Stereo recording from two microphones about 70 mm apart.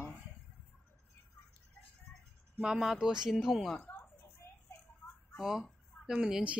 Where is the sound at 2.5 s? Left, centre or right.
Centre.